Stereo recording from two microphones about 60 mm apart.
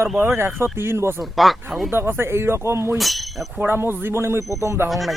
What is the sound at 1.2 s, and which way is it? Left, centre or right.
Speech, centre.